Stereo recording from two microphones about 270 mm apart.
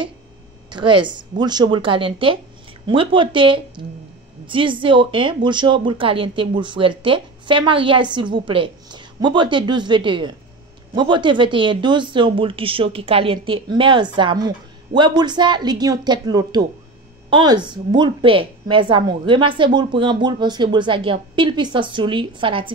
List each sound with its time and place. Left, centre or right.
0.7 s a woman's voice: centre